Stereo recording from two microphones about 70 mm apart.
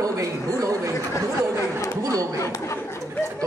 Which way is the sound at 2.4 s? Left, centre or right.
Left.